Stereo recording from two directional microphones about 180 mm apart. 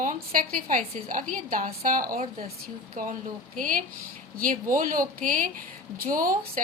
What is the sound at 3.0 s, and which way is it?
A woman's voice, 45° right (ahead or behind).